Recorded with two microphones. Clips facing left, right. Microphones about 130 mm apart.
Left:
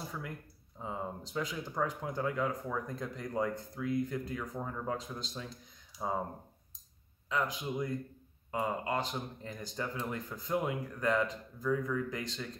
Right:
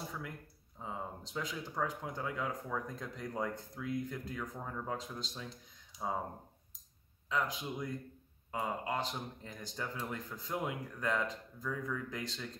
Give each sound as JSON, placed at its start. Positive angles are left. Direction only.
{"t": 0.8, "sound": "speech", "side_deg": 0}
{"t": 5.9, "sound": "speech", "side_deg": -20}
{"t": 7.2, "sound": "speech", "side_deg": 0}